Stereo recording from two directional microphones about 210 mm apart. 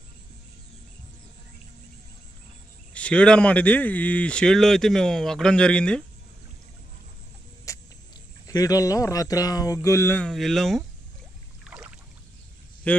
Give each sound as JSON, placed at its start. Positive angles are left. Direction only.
{"t": 2.9, "sound": "speech", "side_deg": 5}
{"t": 7.7, "sound": "music", "side_deg": 15}
{"t": 8.5, "sound": "speech", "side_deg": 15}
{"t": 11.6, "sound": "rowboat", "side_deg": -5}
{"t": 12.9, "sound": "speech", "side_deg": 5}